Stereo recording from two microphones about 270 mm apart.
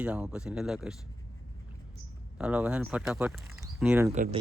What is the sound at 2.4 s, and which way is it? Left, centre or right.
Speech, centre.